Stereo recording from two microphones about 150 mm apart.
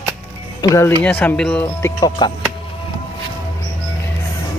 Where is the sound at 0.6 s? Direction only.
20° left (ahead or behind).